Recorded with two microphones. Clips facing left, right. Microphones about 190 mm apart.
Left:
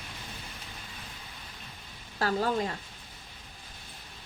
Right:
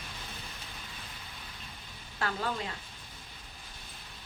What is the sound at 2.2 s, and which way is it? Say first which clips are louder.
Speech: left 6 dB; 40° left (ahead or behind).